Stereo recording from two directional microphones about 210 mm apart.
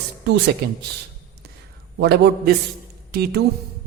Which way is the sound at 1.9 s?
50° right (ahead or behind).